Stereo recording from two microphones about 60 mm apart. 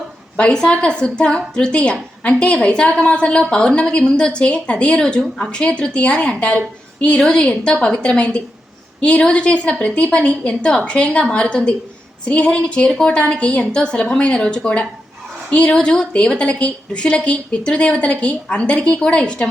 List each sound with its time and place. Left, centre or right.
0.3 s a woman's voice: centre